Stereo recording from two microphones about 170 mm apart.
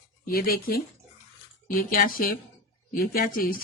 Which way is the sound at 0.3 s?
60° left (ahead or behind).